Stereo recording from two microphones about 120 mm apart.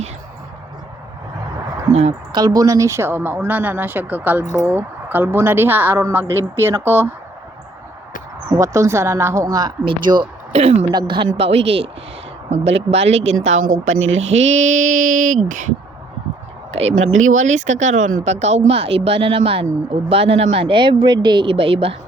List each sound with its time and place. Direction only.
1.9 s a woman's voice: 60° right (ahead or behind)
2.3 s a woman's voice: 35° right (ahead or behind)
8.5 s a woman's voice: 25° right (ahead or behind)
9.8 s speech: 45° right (ahead or behind)
10.5 s a woman's voice: 60° right (ahead or behind)
10.9 s speech: 40° right (ahead or behind)
11.3 s a woman's voice: 55° right (ahead or behind); by 15.7 s 90° right
16.7 s speech: 75° right (ahead or behind); by 21.9 s 50° right (ahead or behind)